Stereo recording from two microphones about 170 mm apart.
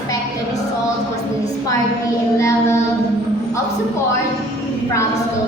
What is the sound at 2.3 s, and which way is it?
Child singing, 15° left (ahead or behind).